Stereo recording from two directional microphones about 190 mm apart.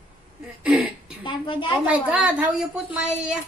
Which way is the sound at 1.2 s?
25° left (ahead or behind).